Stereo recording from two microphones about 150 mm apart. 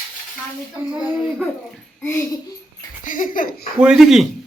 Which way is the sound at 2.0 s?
15° left (ahead or behind).